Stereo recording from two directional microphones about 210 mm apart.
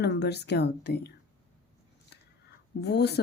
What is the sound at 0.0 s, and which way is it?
A woman's voice, 50° left (ahead or behind).